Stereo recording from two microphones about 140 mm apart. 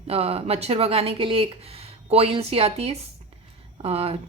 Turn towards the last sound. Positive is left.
turn(degrees=-45)  # may be behind; listen again after turning